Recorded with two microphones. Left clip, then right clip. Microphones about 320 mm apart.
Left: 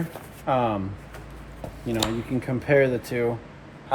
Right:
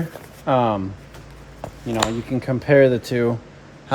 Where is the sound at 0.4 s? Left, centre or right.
Right.